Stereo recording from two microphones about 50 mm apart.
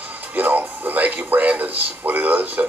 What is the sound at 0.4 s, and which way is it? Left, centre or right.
Speech, right.